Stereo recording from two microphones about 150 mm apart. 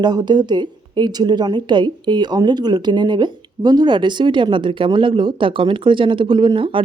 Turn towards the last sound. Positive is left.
turn(degrees=-35)  # may be behind; listen again after turning